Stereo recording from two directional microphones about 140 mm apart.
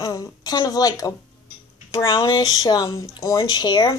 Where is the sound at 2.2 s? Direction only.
30° left (ahead or behind).